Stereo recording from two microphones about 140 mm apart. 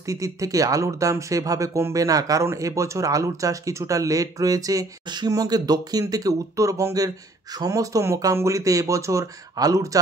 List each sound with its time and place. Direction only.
0.0 s speech: 25° right (ahead or behind)